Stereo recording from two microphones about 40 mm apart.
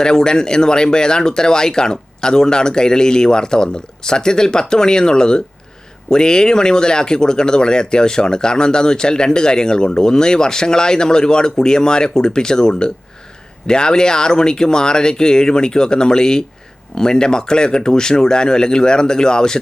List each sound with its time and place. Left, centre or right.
0.0 s speech: centre